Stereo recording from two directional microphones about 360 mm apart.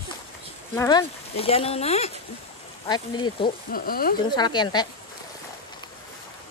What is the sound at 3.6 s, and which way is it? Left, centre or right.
Speech, left.